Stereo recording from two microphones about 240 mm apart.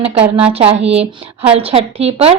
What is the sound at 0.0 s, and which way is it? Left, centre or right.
A woman's voice, right.